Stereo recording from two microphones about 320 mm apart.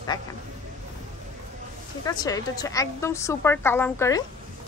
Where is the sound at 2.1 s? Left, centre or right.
Centre.